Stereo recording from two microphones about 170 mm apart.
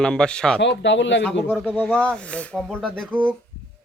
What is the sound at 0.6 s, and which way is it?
Speech, 90° left.